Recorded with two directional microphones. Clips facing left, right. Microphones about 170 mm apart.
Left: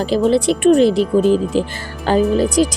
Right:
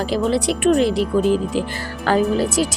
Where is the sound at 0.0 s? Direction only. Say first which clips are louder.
Left 4 dB; 25° left (ahead or behind).